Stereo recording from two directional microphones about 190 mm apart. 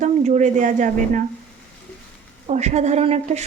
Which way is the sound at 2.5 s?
35° right (ahead or behind).